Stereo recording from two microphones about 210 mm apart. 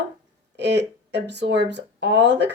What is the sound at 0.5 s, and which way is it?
Speech, 55° right (ahead or behind).